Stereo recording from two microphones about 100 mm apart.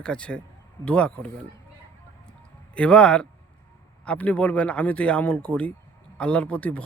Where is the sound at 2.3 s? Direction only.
10° left (ahead or behind).